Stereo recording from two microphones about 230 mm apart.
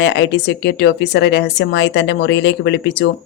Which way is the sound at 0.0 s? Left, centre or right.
Left.